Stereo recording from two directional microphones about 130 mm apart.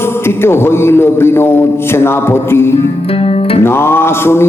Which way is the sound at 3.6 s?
20° left (ahead or behind).